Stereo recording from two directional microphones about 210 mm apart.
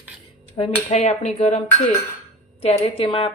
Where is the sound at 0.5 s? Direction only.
30° left (ahead or behind).